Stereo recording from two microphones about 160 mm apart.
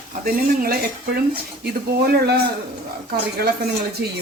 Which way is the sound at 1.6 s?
80° right.